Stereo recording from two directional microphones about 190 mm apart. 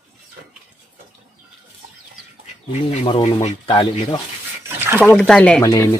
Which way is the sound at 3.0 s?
25° left (ahead or behind).